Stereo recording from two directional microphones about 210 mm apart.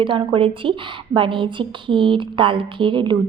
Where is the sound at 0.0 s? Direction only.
25° right (ahead or behind).